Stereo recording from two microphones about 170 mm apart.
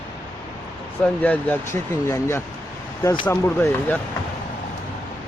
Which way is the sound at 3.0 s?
25° left (ahead or behind).